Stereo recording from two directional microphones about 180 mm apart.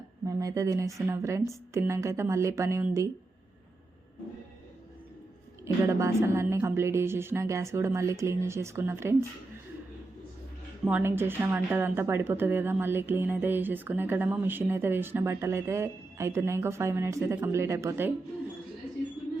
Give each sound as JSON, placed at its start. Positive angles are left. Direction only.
{"t": 0.3, "sound": "speech", "side_deg": -20}
{"t": 5.6, "sound": "speech", "side_deg": -15}
{"t": 10.8, "sound": "speech", "side_deg": -10}